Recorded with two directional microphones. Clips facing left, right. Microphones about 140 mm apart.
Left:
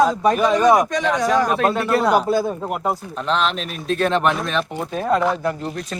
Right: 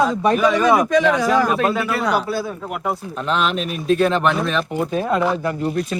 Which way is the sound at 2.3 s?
45° left (ahead or behind).